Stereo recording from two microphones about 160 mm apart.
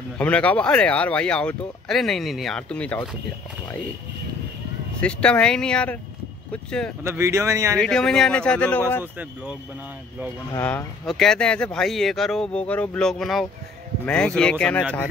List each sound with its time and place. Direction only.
0.2 s speech: 10° left (ahead or behind)
5.0 s speech: 5° left (ahead or behind)
7.0 s speech: 15° right (ahead or behind)
7.7 s speech: 5° left (ahead or behind)
9.0 s speech: 10° right (ahead or behind)
10.6 s speech: 10° left (ahead or behind)